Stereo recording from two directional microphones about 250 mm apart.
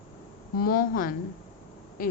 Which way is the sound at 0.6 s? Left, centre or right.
Left.